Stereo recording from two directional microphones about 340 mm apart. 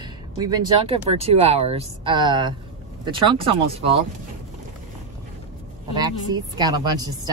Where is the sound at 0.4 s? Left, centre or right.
Centre.